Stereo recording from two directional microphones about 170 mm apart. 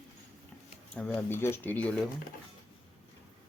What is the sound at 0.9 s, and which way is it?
Speech, 5° left (ahead or behind).